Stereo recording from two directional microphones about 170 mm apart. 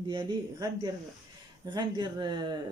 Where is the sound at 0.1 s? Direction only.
25° right (ahead or behind).